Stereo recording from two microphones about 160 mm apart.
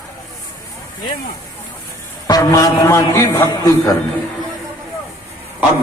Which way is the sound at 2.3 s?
20° left (ahead or behind).